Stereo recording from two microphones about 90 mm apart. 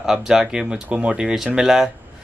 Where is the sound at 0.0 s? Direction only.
5° right (ahead or behind).